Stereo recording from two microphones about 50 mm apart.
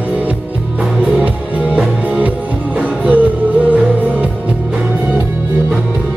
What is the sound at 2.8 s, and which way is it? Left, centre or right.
Music, right.